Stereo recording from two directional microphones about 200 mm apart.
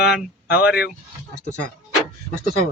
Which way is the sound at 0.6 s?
5° right (ahead or behind).